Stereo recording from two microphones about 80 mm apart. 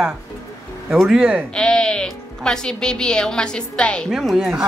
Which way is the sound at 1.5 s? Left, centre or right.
Centre.